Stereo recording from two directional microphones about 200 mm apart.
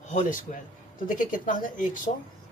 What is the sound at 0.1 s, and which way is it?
Speech, 40° left (ahead or behind).